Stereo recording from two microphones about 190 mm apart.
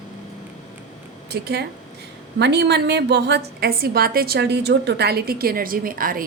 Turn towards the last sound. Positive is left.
turn(degrees=-50)  # may be behind; listen again after turning